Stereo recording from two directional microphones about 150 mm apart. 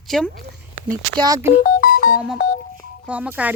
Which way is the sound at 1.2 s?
25° right (ahead or behind).